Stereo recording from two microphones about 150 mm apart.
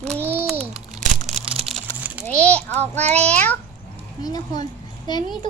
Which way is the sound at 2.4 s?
10° left (ahead or behind).